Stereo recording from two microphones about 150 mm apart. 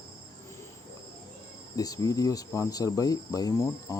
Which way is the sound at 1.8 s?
25° left (ahead or behind).